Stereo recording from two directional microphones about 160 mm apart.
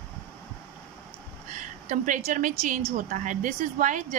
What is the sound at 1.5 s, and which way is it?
A woman's voice, 50° right (ahead or behind).